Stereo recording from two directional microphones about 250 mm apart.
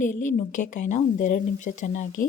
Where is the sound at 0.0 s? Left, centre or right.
Left.